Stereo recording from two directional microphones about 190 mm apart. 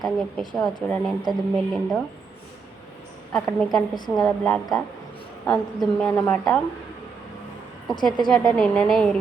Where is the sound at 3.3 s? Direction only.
Centre (ahead or behind).